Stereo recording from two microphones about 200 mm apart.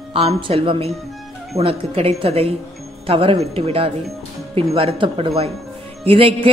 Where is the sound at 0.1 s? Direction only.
30° right (ahead or behind).